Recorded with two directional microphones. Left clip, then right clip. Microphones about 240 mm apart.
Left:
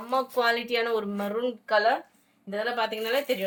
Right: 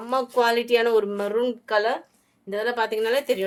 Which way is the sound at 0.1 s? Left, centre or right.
Right.